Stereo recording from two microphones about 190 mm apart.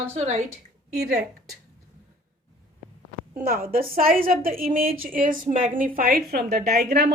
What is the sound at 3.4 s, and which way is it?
A woman's voice, 50° right (ahead or behind).